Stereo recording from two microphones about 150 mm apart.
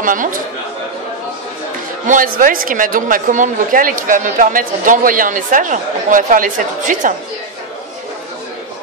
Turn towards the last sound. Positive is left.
turn(degrees=-60)  # may be behind; listen again after turning